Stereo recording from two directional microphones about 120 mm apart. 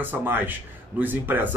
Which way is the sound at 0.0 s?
15° right (ahead or behind).